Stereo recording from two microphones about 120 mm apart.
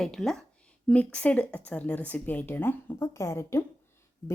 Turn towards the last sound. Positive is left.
turn(degrees=20)  # may be behind; listen again after turning